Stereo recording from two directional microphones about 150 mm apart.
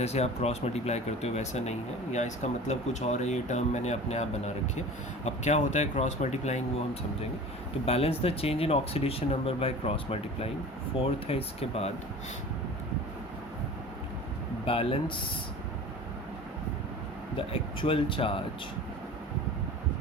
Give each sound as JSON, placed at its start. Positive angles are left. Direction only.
{"t": 0.0, "sound": "speech", "side_deg": 45}
{"t": 7.9, "sound": "speech", "side_deg": 40}
{"t": 14.7, "sound": "speech", "side_deg": 35}
{"t": 17.3, "sound": "speech", "side_deg": 35}